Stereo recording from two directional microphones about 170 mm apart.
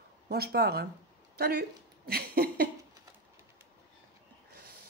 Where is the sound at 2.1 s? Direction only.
60° right (ahead or behind).